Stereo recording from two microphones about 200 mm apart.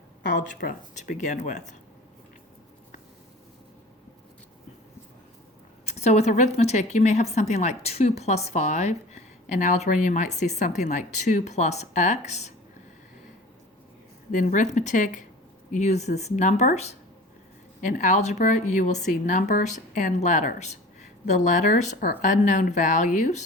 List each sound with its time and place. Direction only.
0.4 s a woman's voice: 40° left (ahead or behind)
5.8 s a woman's voice: 35° left (ahead or behind)
14.3 s a woman's voice: 40° left (ahead or behind)